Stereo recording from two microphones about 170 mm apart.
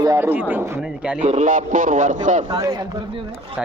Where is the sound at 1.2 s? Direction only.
45° right (ahead or behind).